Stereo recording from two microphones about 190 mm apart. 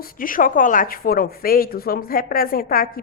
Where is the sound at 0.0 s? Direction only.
50° left (ahead or behind).